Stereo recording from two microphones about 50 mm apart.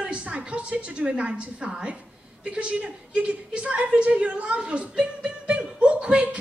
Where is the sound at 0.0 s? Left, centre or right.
Right.